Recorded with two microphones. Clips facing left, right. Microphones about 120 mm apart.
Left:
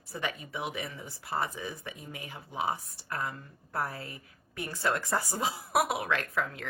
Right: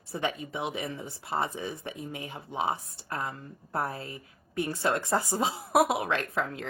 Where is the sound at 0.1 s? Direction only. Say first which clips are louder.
Right 4 dB; 25° right (ahead or behind).